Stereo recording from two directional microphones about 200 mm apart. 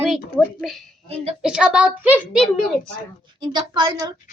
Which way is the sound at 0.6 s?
Centre (ahead or behind).